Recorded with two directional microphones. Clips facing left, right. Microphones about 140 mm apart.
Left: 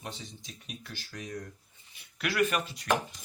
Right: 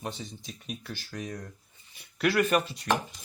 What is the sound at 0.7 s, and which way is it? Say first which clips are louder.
Speech: right 6 dB; 45° right (ahead or behind).